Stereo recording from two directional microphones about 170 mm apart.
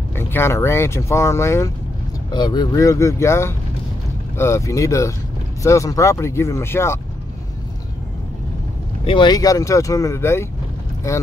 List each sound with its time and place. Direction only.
0.1 s speech: 15° left (ahead or behind)
9.0 s speech: 30° left (ahead or behind)